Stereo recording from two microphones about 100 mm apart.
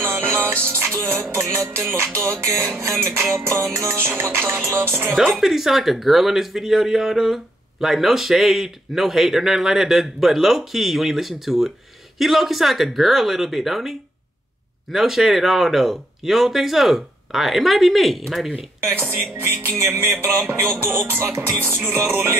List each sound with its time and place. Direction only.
0.0 s music: 20° right (ahead or behind)
5.1 s speech: centre (ahead or behind)
19.3 s music: 25° right (ahead or behind)